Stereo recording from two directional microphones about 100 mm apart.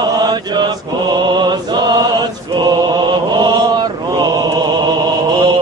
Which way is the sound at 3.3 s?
45° right (ahead or behind).